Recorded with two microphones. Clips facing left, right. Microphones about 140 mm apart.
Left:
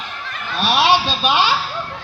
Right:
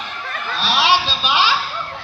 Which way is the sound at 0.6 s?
50° left (ahead or behind).